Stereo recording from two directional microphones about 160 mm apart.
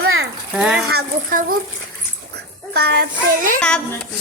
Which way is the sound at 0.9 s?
70° right (ahead or behind).